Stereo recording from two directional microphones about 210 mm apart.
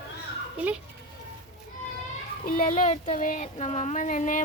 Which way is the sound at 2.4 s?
40° left (ahead or behind).